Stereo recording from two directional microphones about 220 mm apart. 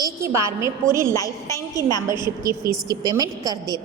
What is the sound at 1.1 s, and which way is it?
Speech, 15° left (ahead or behind).